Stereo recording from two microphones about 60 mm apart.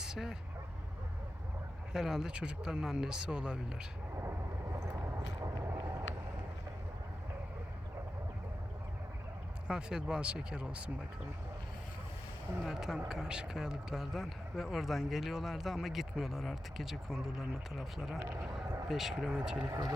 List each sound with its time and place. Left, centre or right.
0.0 s vehicle: centre
1.9 s speech: centre
4.1 s vehicle: right
5.4 s vehicle: right
5.7 s vehicle: right
9.6 s speech: centre
12.6 s speech: centre